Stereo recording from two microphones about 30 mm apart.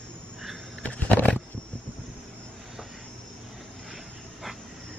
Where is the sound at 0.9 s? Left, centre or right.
Left.